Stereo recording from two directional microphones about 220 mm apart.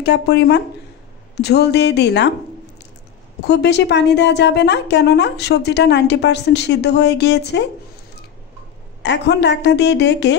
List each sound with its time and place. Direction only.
0.0 s a woman's voice: 50° left (ahead or behind)
3.4 s a woman's voice: 50° left (ahead or behind)
9.0 s a woman's voice: 50° left (ahead or behind)